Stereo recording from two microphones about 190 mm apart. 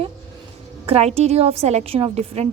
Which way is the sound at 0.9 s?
35° right (ahead or behind).